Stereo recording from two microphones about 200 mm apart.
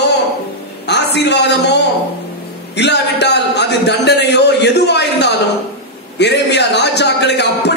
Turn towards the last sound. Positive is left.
turn(degrees=55)  # may be behind; listen again after turning